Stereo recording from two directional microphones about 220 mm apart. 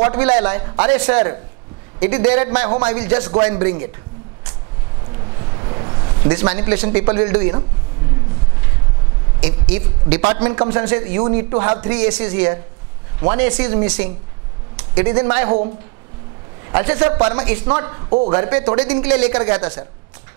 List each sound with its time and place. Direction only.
0.2 s speech: 20° right (ahead or behind)
5.7 s a sound: 30° right (ahead or behind)
6.5 s speech: 15° right (ahead or behind)
9.4 s speech: 55° right (ahead or behind)
10.2 s speech: 20° right (ahead or behind)
11.2 s speech: 25° right (ahead or behind)
16.7 s speech: 20° right (ahead or behind)